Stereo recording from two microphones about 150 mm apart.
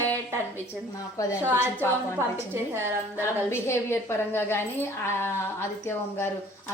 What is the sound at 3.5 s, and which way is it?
A woman's voice, 15° left (ahead or behind).